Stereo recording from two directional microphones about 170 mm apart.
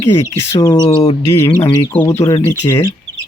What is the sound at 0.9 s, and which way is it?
Bird, 35° left (ahead or behind).